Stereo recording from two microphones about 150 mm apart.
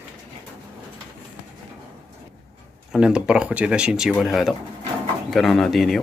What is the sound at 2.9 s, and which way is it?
Speech, 5° right (ahead or behind).